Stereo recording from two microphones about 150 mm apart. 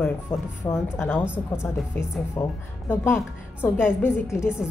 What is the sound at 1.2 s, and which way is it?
Speech, 10° right (ahead or behind).